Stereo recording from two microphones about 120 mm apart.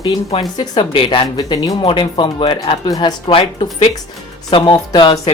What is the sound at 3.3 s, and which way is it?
Speech, 50° left (ahead or behind).